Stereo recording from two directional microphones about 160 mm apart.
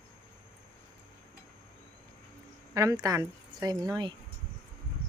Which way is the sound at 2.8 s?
20° right (ahead or behind).